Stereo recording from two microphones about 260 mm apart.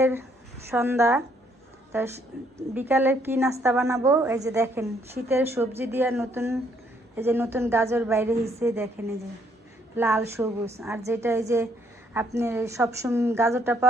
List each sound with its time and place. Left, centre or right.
0.0 s a woman's voice: centre
9.9 s a woman's voice: centre